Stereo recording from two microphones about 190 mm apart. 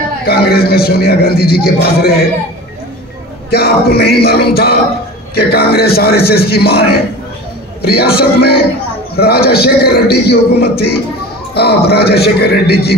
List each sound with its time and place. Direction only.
0.3 s a man's voice: 55° left (ahead or behind)
3.4 s a man's voice: 55° left (ahead or behind)